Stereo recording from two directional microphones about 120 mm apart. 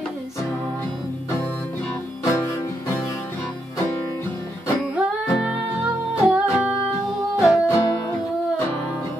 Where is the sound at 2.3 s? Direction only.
25° left (ahead or behind).